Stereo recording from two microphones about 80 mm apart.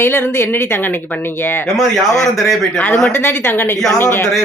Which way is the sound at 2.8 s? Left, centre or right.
Left.